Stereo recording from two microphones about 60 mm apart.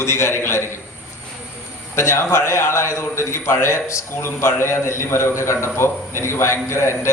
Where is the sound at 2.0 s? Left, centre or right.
Left.